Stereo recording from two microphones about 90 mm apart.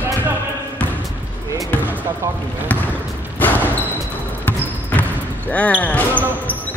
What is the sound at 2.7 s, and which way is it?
Basketball bounce, 15° left (ahead or behind).